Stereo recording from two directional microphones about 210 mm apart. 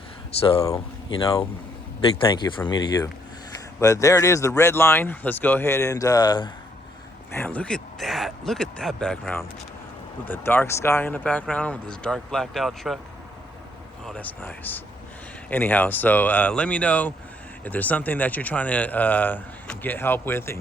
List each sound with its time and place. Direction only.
0.3 s speech: 30° left (ahead or behind)
7.3 s speech: 10° left (ahead or behind)
14.0 s speech: 5° left (ahead or behind)